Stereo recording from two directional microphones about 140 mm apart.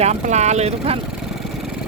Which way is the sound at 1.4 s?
Centre (ahead or behind).